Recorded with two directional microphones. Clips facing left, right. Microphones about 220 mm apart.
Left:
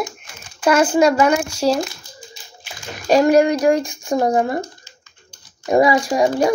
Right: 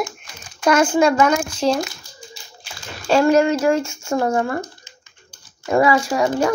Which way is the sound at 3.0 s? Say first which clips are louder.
Left 2 dB; 15° left (ahead or behind).